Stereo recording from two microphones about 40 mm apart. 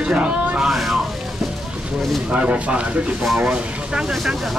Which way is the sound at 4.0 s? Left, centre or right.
Centre.